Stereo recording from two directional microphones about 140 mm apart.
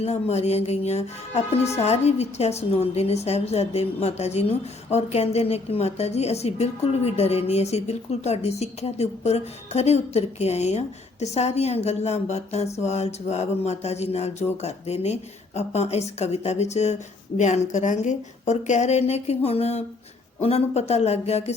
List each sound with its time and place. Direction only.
0.0 s a woman's voice: 50° left (ahead or behind)